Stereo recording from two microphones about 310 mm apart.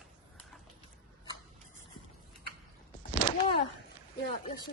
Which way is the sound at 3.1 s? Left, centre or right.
Left.